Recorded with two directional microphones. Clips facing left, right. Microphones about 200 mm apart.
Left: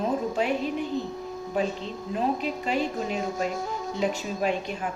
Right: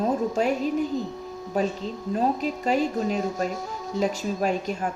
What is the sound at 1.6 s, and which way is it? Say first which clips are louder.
A woman's voice: right 2 dB; 40° right (ahead or behind).